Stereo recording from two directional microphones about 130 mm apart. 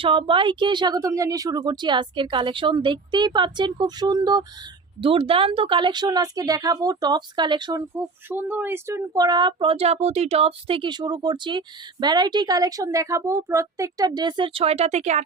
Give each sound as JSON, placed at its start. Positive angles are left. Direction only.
{"t": 0.0, "sound": "speech", "side_deg": -40}
{"t": 4.9, "sound": "speech", "side_deg": -45}
{"t": 8.3, "sound": "speech", "side_deg": -15}
{"t": 9.1, "sound": "speech", "side_deg": -30}